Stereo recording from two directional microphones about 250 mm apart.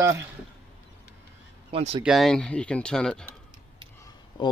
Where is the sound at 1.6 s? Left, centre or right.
Right.